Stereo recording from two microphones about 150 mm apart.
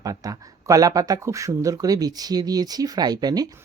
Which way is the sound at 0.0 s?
25° right (ahead or behind).